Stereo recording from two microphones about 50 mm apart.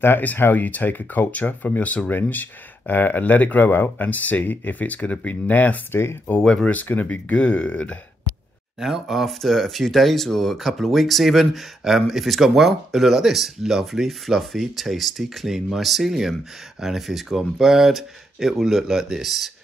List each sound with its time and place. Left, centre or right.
0.4 s speech: left
6.4 s speech: centre
6.7 s speech: left
8.7 s speech: centre